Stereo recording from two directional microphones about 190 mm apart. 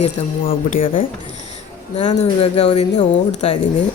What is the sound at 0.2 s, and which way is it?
Speech, 35° left (ahead or behind).